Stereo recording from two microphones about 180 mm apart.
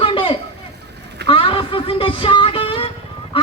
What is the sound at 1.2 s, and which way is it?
Music, 30° left (ahead or behind).